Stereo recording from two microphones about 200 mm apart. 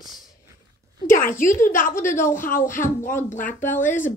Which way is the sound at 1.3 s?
40° left (ahead or behind).